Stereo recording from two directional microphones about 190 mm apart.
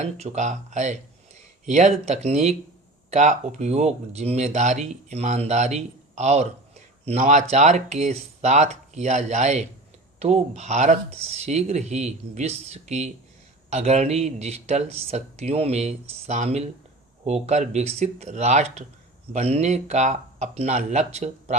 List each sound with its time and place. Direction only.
0.0 s speech: 35° right (ahead or behind)